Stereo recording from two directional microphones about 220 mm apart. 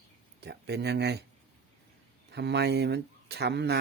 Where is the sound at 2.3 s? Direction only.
50° right (ahead or behind).